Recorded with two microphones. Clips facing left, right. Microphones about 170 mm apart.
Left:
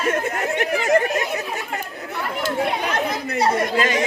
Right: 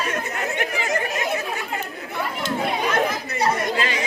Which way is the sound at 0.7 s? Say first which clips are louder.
Left 11 dB; 45° left (ahead or behind).